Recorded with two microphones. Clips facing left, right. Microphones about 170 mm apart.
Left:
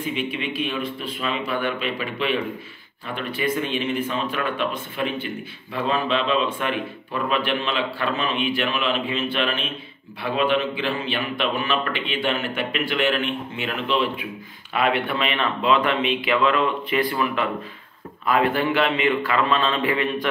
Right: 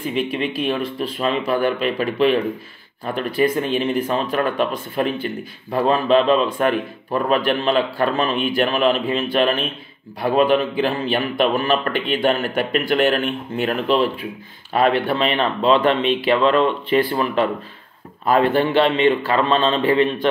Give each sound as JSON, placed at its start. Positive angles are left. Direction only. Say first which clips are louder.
{"t": 0.1, "sound": "speech", "louder": "right 5 dB", "side_deg": -35}